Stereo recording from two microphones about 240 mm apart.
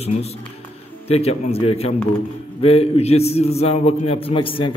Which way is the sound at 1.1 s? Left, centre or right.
Left.